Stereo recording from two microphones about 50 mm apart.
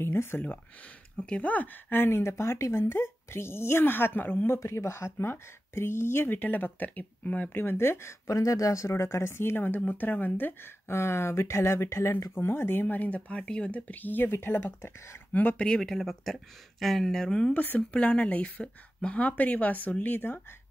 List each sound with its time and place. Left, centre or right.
0.0 s a sound: left
1.1 s speech: left
4.6 s speech: left
12.8 s speech: left
15.3 s speech: left
15.8 s speech: centre
19.2 s speech: left